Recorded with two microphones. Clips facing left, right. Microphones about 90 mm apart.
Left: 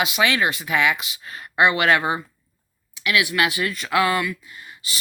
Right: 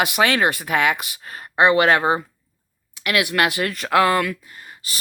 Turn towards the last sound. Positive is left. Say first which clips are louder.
# even
turn(degrees=-45)  # may be behind; listen again after turning